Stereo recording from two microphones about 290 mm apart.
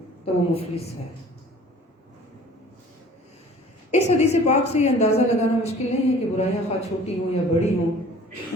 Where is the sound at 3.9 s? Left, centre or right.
Left.